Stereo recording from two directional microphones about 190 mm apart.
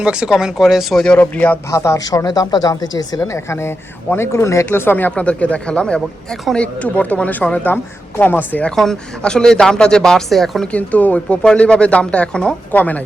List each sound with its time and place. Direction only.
0.0 s speech: 5° right (ahead or behind)